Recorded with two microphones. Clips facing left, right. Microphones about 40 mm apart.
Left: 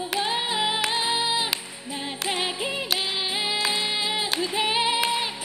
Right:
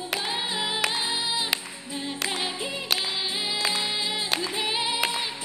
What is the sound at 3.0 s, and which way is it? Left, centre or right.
Singing, centre.